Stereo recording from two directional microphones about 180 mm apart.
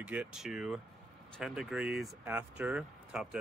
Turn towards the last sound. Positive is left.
turn(degrees=-5)  # may be behind; listen again after turning